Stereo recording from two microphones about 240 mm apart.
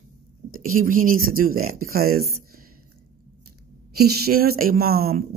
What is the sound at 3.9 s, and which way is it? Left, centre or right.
Speech, right.